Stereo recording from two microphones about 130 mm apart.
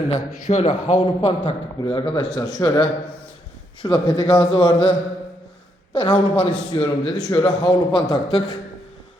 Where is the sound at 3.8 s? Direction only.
30° left (ahead or behind).